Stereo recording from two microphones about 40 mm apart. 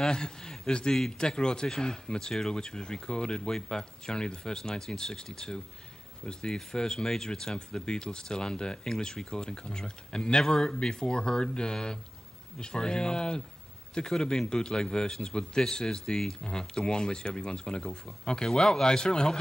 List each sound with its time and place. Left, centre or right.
0.0 s a man's voice: centre
0.9 s speech: centre
1.2 s speech: centre